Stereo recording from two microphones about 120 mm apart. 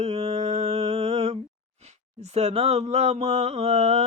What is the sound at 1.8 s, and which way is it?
Speech, 60° right (ahead or behind).